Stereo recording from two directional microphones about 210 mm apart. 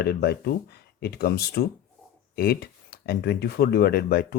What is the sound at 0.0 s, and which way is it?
Speech, 50° left (ahead or behind).